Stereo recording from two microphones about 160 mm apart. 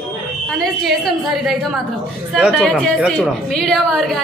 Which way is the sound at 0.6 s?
Centre (ahead or behind).